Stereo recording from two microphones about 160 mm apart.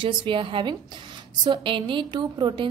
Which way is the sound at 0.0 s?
30° right (ahead or behind).